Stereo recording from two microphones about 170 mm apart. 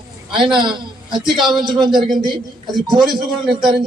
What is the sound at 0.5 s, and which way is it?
Speech, 25° right (ahead or behind).